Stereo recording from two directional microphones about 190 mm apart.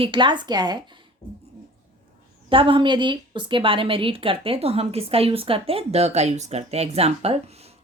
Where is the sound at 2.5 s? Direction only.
25° right (ahead or behind).